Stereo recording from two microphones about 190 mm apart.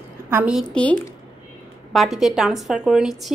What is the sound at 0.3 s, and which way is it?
Speech, 5° right (ahead or behind).